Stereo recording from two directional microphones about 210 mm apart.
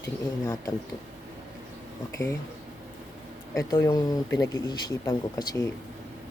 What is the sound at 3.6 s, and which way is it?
Speech, 15° left (ahead or behind).